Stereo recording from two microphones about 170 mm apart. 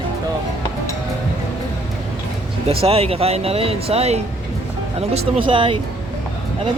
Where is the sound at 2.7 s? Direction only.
35° right (ahead or behind).